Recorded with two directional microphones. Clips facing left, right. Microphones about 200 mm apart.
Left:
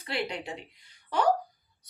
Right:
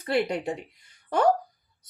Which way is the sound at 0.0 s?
45° right (ahead or behind).